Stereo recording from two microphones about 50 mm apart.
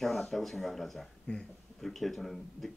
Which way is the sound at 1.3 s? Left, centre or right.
Left.